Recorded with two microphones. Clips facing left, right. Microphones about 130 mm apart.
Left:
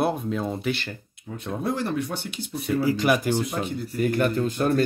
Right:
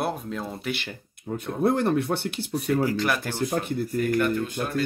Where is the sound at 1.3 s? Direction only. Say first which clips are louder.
Right 6 dB; 40° right (ahead or behind).